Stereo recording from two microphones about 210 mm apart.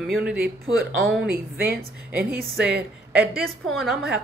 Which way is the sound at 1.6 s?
45° right (ahead or behind).